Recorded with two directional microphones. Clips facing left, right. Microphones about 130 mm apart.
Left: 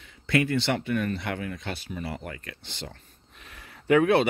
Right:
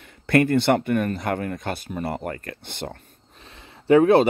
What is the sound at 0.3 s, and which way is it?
Speech, 50° right (ahead or behind).